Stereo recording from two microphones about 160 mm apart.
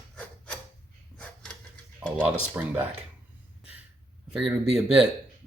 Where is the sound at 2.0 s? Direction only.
5° right (ahead or behind).